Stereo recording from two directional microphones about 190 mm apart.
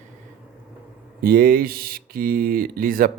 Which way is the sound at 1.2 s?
50° right (ahead or behind).